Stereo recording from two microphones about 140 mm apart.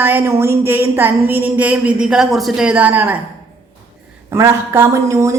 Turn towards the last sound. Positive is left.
turn(degrees=-20)  # may be behind; listen again after turning